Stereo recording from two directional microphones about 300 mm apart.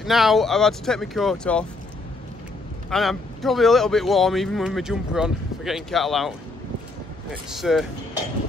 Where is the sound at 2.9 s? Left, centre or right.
Centre.